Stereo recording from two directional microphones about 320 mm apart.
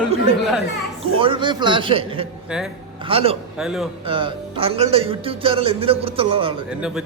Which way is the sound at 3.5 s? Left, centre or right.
Centre.